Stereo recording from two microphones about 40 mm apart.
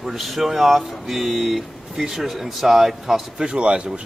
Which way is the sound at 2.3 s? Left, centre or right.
Centre.